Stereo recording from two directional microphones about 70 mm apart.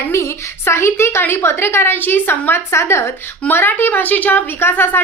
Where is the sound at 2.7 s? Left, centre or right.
Left.